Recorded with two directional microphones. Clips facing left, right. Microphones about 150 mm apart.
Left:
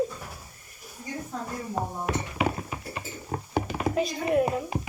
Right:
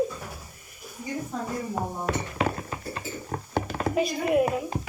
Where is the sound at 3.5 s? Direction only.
10° left (ahead or behind).